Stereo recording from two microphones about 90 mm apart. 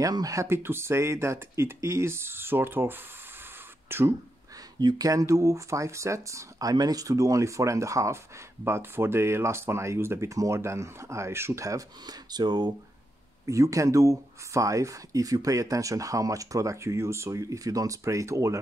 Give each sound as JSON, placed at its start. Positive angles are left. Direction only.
{"t": 0.0, "sound": "speech", "side_deg": -40}
{"t": 4.7, "sound": "speech", "side_deg": -50}
{"t": 13.5, "sound": "speech", "side_deg": -35}